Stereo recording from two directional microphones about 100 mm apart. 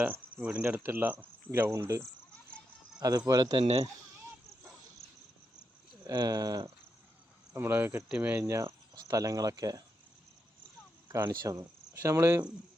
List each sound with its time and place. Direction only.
0.0 s speech: 15° right (ahead or behind)
3.0 s speech: 40° right (ahead or behind)
5.0 s cricket: centre (ahead or behind)
6.1 s speech: 40° right (ahead or behind)
7.5 s speech: 20° right (ahead or behind)
8.1 s cricket: 15° right (ahead or behind)
8.4 s speech: 30° right (ahead or behind)
11.3 s speech: 40° right (ahead or behind)
12.0 s speech: 25° right (ahead or behind)